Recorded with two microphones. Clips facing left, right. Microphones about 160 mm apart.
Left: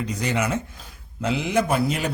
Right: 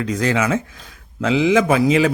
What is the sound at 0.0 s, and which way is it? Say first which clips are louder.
Speech: right 6 dB; 90° right.